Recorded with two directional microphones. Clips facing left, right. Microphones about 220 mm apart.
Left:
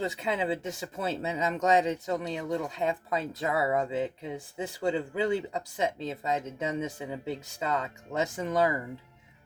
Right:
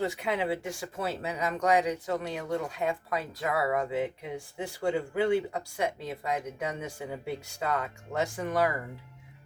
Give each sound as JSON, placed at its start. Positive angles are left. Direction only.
{"t": 0.0, "sound": "speech", "side_deg": 20}